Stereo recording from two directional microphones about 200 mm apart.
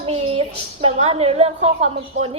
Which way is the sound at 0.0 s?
30° right (ahead or behind).